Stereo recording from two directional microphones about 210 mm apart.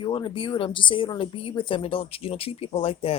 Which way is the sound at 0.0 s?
25° left (ahead or behind).